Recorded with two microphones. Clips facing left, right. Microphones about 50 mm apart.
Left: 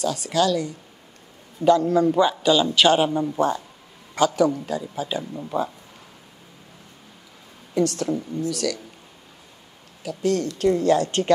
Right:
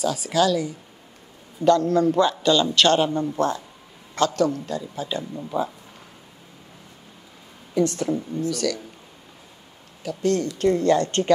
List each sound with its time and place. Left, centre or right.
0.0 s a woman's voice: centre
7.8 s a woman's voice: right
8.5 s a woman's voice: centre
10.0 s a woman's voice: centre